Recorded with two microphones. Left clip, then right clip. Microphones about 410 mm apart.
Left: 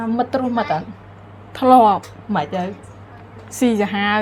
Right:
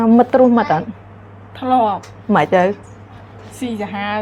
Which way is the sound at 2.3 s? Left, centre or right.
Right.